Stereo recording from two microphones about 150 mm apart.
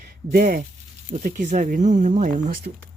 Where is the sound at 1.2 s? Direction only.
55° right (ahead or behind).